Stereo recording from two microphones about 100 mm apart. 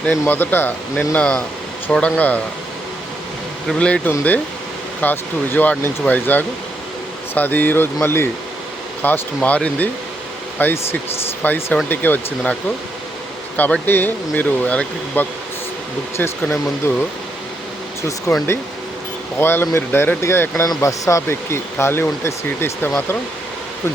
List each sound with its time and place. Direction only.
0.0 s speech: 20° left (ahead or behind)
3.7 s speech: 10° left (ahead or behind)
13.6 s speech: 15° left (ahead or behind)
16.4 s speech: 20° left (ahead or behind)
18.3 s speech: 25° left (ahead or behind)